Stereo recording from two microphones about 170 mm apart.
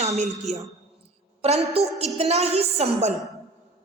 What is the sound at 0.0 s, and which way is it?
A woman's voice, 40° right (ahead or behind).